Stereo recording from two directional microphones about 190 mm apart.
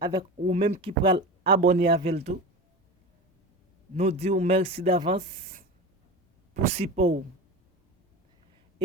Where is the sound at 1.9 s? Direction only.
30° right (ahead or behind).